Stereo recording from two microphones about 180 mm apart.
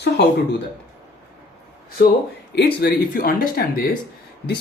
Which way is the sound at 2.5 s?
65° left (ahead or behind).